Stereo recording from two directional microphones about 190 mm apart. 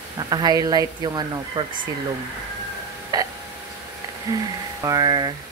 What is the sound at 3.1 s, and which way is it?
Speech, 20° right (ahead or behind).